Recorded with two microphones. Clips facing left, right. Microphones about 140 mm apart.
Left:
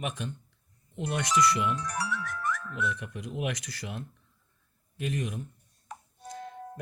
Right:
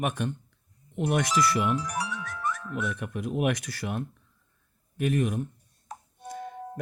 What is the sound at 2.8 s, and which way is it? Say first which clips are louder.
Speech: right 2 dB; 55° right (ahead or behind).